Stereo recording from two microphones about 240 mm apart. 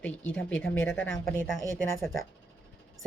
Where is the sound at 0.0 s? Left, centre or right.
Centre.